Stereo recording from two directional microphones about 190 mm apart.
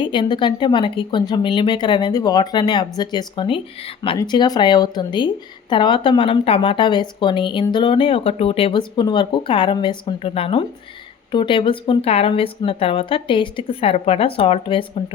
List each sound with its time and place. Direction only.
0.0 s a woman's voice: 25° left (ahead or behind)